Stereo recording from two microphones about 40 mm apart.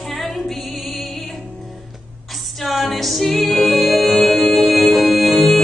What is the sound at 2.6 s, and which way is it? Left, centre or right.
Music, centre.